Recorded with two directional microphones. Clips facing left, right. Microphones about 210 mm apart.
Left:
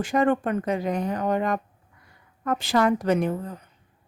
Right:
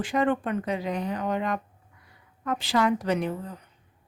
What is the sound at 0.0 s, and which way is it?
Speech, 45° left (ahead or behind).